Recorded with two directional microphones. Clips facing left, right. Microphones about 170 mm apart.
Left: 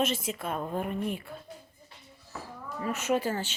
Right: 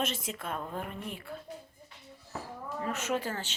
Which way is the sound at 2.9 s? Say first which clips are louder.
Left 5 dB; 10° left (ahead or behind).